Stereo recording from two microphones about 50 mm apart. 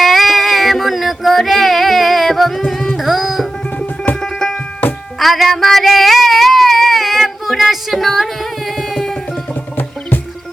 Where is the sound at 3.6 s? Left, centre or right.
Left.